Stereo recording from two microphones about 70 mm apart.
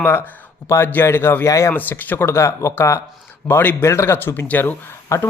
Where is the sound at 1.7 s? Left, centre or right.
Left.